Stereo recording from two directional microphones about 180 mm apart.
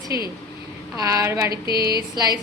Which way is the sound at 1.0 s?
20° right (ahead or behind).